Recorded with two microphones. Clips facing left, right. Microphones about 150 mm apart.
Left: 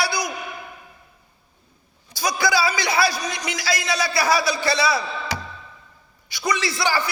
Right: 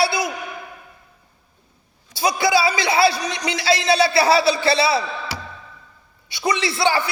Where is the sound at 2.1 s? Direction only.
25° right (ahead or behind).